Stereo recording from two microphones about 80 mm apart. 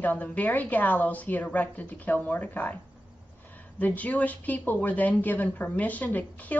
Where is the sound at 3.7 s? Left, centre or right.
Centre.